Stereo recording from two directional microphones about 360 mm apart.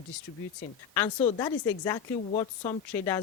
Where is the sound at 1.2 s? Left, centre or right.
Centre.